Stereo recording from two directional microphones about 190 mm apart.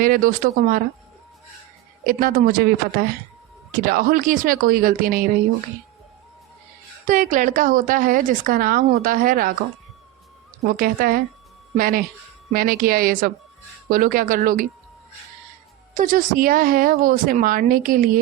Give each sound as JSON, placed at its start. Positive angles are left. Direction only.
{"t": 0.0, "sound": "a woman's voice", "side_deg": -50}
{"t": 2.0, "sound": "a woman's voice", "side_deg": -50}
{"t": 7.1, "sound": "a woman's voice", "side_deg": -45}
{"t": 10.6, "sound": "a woman's voice", "side_deg": -50}
{"t": 16.0, "sound": "a woman's voice", "side_deg": -45}